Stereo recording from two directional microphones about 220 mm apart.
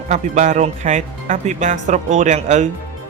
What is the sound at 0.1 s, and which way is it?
Speech, 35° right (ahead or behind).